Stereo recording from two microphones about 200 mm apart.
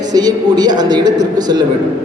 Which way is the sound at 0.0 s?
20° right (ahead or behind).